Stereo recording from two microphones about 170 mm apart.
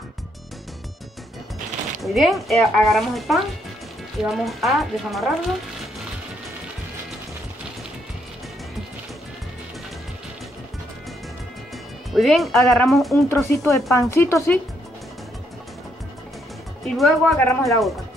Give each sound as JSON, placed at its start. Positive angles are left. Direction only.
{"t": 2.0, "sound": "speech", "side_deg": 0}
{"t": 12.1, "sound": "speech", "side_deg": 0}
{"t": 13.3, "sound": "speech", "side_deg": 15}
{"t": 16.8, "sound": "speech", "side_deg": 0}
{"t": 17.4, "sound": "speech", "side_deg": 15}